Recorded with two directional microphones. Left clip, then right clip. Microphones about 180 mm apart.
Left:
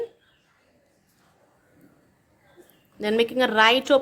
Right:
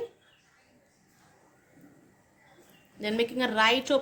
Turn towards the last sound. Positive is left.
turn(degrees=50)  # may be behind; listen again after turning